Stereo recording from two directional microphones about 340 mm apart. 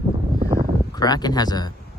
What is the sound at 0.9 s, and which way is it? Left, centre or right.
Speech, centre.